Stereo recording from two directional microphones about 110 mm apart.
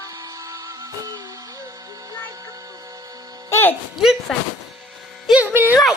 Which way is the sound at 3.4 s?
25° left (ahead or behind).